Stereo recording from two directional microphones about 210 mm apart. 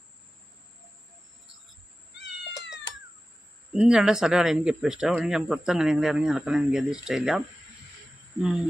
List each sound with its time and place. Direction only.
2.1 s cat: 55° left (ahead or behind)
3.7 s speech: 5° right (ahead or behind)